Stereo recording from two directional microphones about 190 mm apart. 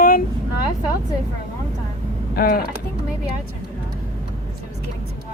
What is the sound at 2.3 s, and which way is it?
Speech, 50° left (ahead or behind).